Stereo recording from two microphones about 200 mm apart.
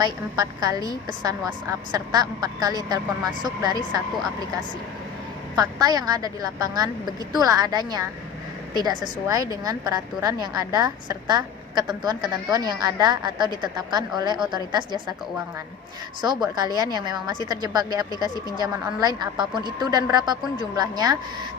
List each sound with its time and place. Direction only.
0.0 s a woman's voice: 20° right (ahead or behind)
5.5 s a woman's voice: 20° right (ahead or behind)
16.2 s a woman's voice: 20° right (ahead or behind)
18.3 s speech: 20° left (ahead or behind)
18.6 s a woman's voice: 20° right (ahead or behind)